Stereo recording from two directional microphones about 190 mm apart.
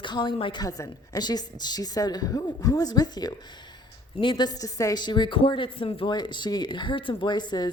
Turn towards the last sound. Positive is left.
turn(degrees=20)  # may be behind; listen again after turning